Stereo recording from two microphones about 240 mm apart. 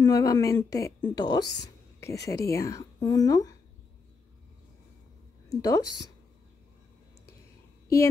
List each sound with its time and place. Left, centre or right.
0.0 s a woman's voice: centre
5.5 s a woman's voice: centre